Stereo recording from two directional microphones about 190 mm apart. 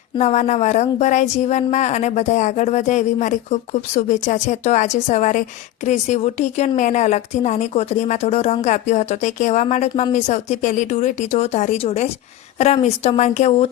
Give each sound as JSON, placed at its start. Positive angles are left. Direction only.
{"t": 0.2, "sound": "speech", "side_deg": 35}